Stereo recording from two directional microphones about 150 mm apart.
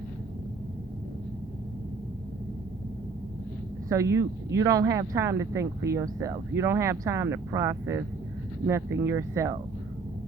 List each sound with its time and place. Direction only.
3.8 s speech: 20° right (ahead or behind)